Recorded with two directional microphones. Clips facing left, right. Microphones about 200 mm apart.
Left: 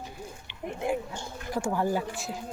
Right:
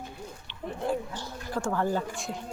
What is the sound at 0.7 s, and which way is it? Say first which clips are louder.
Speech: even; 15° left (ahead or behind).